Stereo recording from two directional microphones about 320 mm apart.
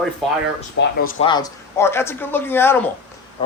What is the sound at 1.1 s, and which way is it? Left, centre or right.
A man's voice, centre.